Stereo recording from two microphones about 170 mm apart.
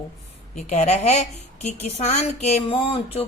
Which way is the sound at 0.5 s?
40° left (ahead or behind).